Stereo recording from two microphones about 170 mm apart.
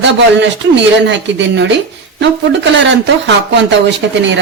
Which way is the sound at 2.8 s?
90° right.